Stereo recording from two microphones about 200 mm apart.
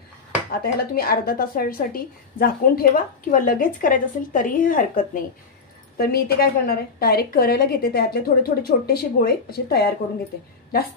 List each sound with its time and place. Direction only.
0.5 s speech: 45° left (ahead or behind)